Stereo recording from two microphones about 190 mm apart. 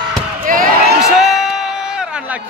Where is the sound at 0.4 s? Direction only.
45° right (ahead or behind).